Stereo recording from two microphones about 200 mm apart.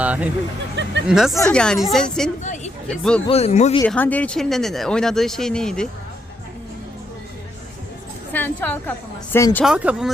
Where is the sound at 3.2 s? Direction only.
30° left (ahead or behind).